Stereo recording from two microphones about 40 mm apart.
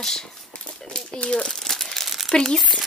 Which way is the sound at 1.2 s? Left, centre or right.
Left.